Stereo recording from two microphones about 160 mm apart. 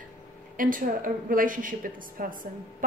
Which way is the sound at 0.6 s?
55° right (ahead or behind).